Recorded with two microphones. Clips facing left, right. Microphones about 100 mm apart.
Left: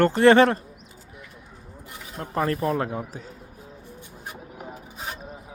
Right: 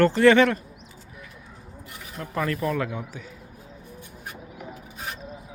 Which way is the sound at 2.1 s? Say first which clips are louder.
Left 2 dB; 35° left (ahead or behind).